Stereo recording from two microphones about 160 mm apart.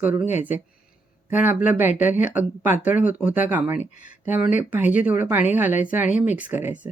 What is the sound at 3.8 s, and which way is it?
Speech, 50° left (ahead or behind).